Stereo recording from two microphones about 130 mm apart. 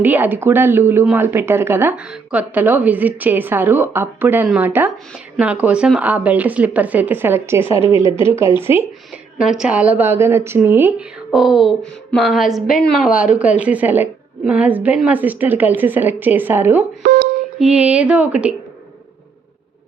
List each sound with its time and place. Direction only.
0.0 s a woman's voice: 15° right (ahead or behind)
9.4 s a woman's voice: 5° right (ahead or behind)
11.3 s a sound: 5° right (ahead or behind)
12.9 s a woman's voice: 5° right (ahead or behind)